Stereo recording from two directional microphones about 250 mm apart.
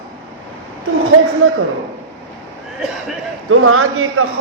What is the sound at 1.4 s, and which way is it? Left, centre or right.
Speech, right.